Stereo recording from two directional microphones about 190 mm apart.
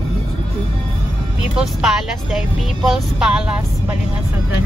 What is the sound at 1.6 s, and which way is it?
Speech, 5° right (ahead or behind).